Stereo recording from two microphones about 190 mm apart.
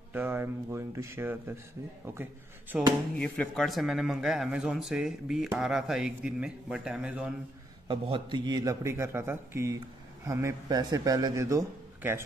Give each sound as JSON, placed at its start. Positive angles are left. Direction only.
{"t": 0.1, "sound": "a man's voice", "side_deg": -10}
{"t": 2.7, "sound": "a man's voice", "side_deg": -5}
{"t": 7.9, "sound": "a man's voice", "side_deg": -25}